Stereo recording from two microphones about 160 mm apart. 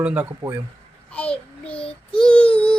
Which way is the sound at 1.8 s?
35° left (ahead or behind).